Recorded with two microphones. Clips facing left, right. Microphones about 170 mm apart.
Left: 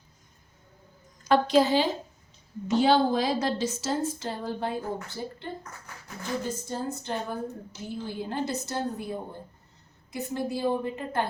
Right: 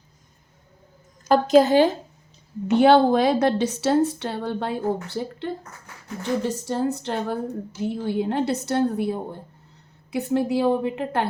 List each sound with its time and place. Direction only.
1.3 s a woman's voice: 45° right (ahead or behind); by 5.5 s 70° right (ahead or behind)
6.5 s a woman's voice: 70° right (ahead or behind)